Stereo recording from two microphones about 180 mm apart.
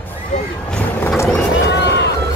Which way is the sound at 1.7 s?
75° left (ahead or behind).